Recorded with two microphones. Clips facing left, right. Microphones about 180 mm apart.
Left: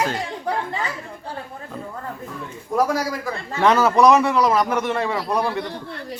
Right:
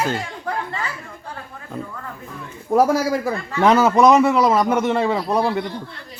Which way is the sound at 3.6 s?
20° right (ahead or behind).